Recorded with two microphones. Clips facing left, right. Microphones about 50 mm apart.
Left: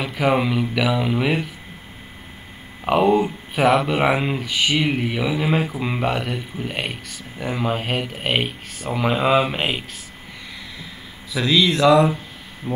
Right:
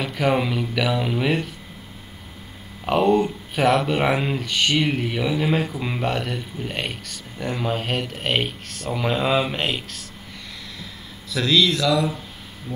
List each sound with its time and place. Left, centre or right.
0.0 s speech: centre
2.8 s speech: centre
11.3 s speech: centre
11.7 s speech: left